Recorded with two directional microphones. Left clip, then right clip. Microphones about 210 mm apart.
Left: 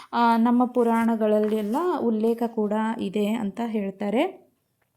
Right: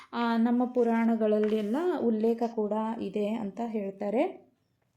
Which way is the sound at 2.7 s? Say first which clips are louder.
Left 5 dB; 40° left (ahead or behind).